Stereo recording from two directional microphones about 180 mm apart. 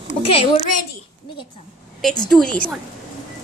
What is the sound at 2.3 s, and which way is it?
Speech, 5° left (ahead or behind).